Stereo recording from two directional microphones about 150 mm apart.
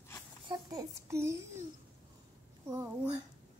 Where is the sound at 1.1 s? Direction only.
20° right (ahead or behind).